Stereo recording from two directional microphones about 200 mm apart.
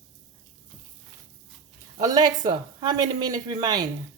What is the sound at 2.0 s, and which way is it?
Speech, 20° right (ahead or behind).